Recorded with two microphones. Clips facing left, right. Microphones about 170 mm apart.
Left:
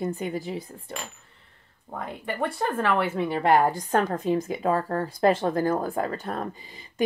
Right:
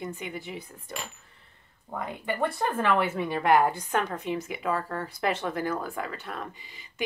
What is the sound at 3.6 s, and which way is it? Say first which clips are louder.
Speech: left 3 dB; 40° left (ahead or behind).